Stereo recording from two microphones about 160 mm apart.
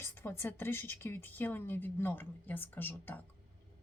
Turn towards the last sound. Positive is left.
turn(degrees=10)  # may be behind; listen again after turning